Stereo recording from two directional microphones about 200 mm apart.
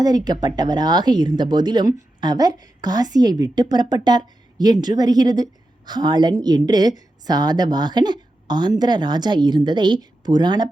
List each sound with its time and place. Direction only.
0.3 s speech: 20° right (ahead or behind)